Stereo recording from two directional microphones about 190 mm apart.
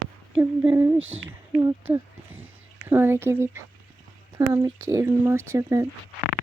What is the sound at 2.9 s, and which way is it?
Speech, 10° right (ahead or behind).